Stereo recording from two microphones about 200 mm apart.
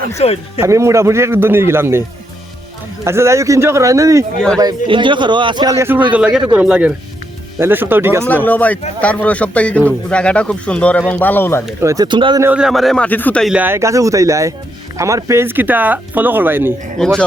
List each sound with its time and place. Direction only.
0.2 s speech: 30° left (ahead or behind)
0.6 s a man's voice: 15° right (ahead or behind)
8.4 s speech: 10° left (ahead or behind)
11.8 s speech: 15° right (ahead or behind)
12.5 s a man's voice: 5° right (ahead or behind)
17.0 s speech: 5° left (ahead or behind)